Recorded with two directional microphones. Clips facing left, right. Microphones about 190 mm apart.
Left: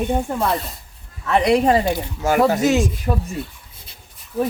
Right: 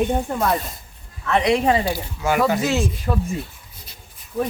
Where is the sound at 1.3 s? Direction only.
40° left (ahead or behind).